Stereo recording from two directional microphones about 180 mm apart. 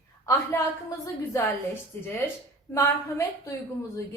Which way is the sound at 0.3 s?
15° left (ahead or behind).